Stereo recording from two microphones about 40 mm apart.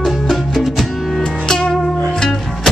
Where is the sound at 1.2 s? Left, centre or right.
Centre.